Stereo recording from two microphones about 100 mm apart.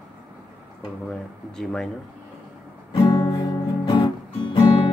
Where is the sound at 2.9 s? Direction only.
50° left (ahead or behind).